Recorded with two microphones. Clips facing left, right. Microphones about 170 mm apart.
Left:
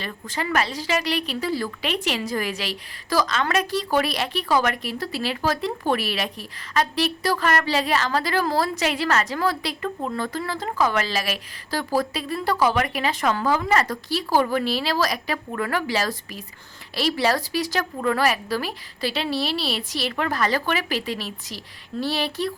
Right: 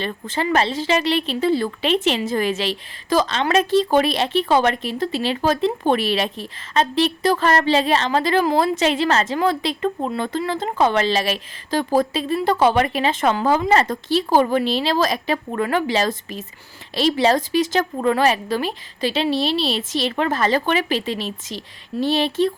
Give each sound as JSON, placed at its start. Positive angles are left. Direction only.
{"t": 0.0, "sound": "speech", "side_deg": -25}